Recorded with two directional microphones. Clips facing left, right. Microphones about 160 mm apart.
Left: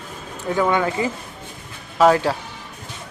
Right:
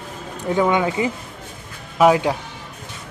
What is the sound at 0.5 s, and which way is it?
Speech, 15° right (ahead or behind).